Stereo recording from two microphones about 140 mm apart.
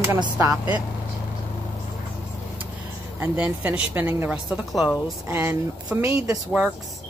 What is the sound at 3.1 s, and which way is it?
Speech, 10° right (ahead or behind).